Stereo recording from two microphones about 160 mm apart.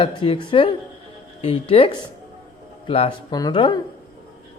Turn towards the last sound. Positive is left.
turn(degrees=30)  # may be behind; listen again after turning